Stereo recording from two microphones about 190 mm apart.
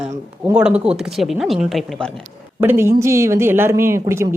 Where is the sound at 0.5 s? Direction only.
5° right (ahead or behind).